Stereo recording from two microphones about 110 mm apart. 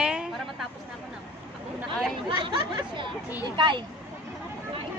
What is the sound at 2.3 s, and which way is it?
Speech, 45° right (ahead or behind).